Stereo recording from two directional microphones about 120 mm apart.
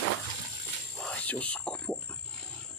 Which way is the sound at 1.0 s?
10° left (ahead or behind).